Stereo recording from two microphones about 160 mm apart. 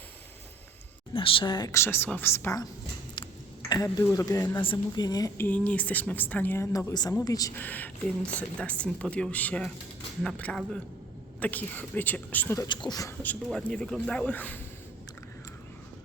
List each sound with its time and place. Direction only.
1.1 s a woman's voice: 35° left (ahead or behind); by 2.6 s 20° left (ahead or behind)
3.2 s a sound: 30° left (ahead or behind)
3.9 s a woman's voice: 20° left (ahead or behind)
5.5 s speech: 10° left (ahead or behind)
12.5 s a woman's voice: 30° left (ahead or behind)
13.2 s speech: 5° left (ahead or behind)